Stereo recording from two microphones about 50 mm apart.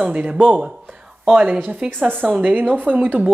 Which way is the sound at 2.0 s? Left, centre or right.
Right.